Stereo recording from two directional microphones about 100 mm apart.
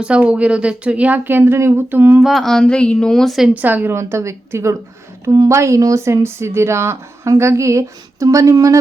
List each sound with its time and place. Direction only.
0.0 s speech: 10° right (ahead or behind)
2.2 s a woman's voice: centre (ahead or behind)
3.5 s a woman's voice: 15° right (ahead or behind)
5.3 s speech: 40° right (ahead or behind)
5.5 s a woman's voice: 30° right (ahead or behind)